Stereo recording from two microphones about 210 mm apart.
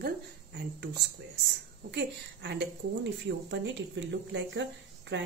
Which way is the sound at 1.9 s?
55° right (ahead or behind).